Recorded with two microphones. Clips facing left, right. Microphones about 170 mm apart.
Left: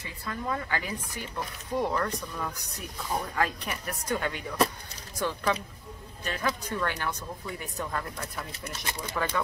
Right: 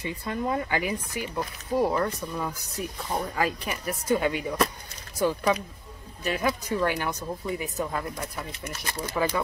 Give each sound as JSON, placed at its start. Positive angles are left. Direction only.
{"t": 0.0, "sound": "speech", "side_deg": -20}